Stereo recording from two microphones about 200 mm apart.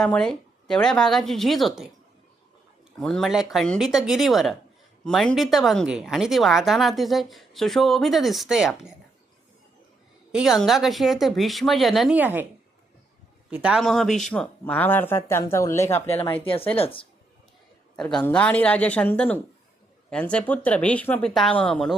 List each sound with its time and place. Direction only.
0.0 s a woman's voice: 5° left (ahead or behind)
3.0 s a woman's voice: centre (ahead or behind)
10.3 s a woman's voice: centre (ahead or behind)
13.5 s speech: 5° right (ahead or behind); by 16.0 s 15° left (ahead or behind)
16.4 s a woman's voice: 30° left (ahead or behind)
17.9 s a woman's voice: 5° left (ahead or behind)